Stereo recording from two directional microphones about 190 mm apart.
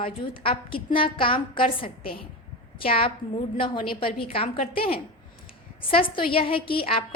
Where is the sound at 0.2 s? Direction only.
30° left (ahead or behind).